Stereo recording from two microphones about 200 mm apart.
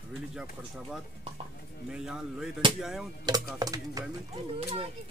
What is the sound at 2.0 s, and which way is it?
Speech, 5° right (ahead or behind).